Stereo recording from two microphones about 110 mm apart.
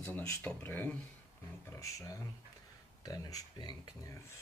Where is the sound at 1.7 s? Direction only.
30° left (ahead or behind).